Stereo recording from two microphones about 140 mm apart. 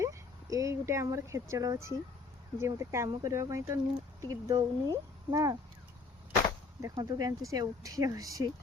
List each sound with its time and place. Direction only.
0.0 s speech: 25° right (ahead or behind)
6.9 s speech: 30° right (ahead or behind)